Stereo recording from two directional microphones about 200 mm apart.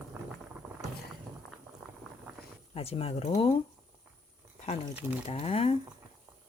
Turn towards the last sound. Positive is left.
turn(degrees=30)  # may be behind; listen again after turning